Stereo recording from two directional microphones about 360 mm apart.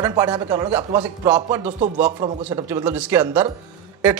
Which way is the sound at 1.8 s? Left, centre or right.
Centre.